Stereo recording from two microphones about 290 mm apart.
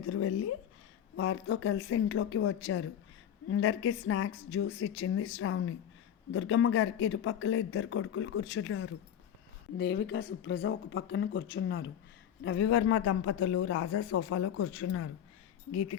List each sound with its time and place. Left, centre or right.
0.1 s speech: left